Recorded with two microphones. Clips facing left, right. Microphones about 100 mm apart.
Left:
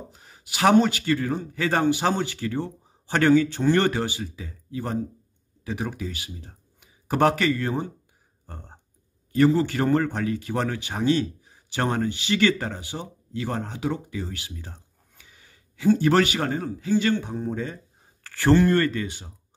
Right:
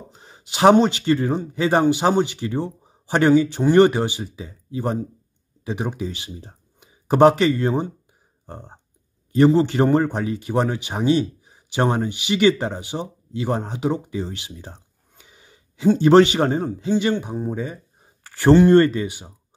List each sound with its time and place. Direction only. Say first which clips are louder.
0.1 s speech: right 3 dB; 25° right (ahead or behind)